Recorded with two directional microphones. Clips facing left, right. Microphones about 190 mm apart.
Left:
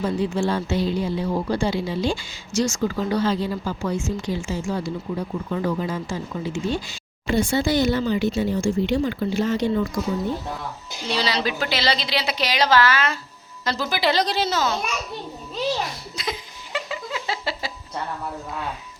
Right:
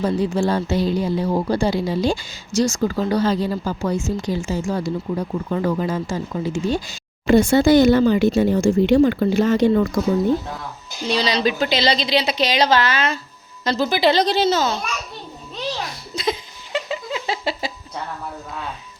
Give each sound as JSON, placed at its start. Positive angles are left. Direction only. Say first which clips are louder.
{"t": 0.0, "sound": "speech", "louder": "right 3 dB", "side_deg": -40}
{"t": 11.1, "sound": "a woman's voice", "louder": "right 4 dB", "side_deg": -20}
{"t": 16.1, "sound": "laughter", "louder": "right 12 dB", "side_deg": -25}